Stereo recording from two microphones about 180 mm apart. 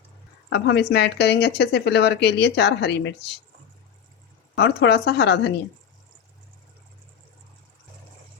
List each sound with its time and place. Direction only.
0.5 s speech: 65° left (ahead or behind)
4.5 s speech: 65° left (ahead or behind)